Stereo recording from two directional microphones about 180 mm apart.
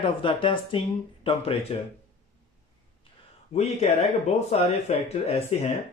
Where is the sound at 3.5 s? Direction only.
40° left (ahead or behind).